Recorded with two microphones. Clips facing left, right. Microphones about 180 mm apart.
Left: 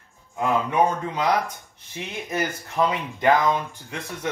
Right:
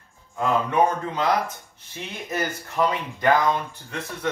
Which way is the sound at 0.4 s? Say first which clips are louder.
Even; 15° left (ahead or behind).